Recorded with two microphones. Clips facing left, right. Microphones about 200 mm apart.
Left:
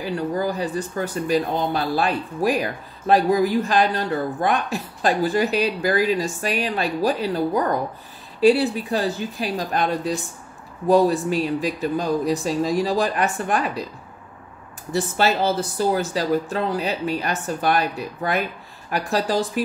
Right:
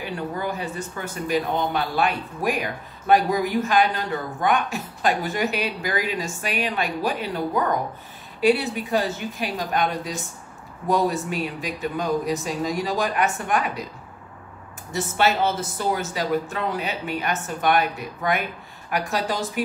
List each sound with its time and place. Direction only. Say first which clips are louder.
0.0 s speech: left 5 dB; 35° left (ahead or behind)
14.9 s speech: left 2 dB; 35° left (ahead or behind)